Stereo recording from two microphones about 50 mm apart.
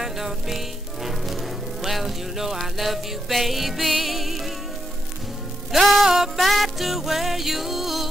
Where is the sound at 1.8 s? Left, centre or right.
Centre.